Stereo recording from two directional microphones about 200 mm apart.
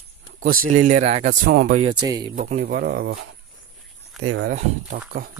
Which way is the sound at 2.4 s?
40° right (ahead or behind).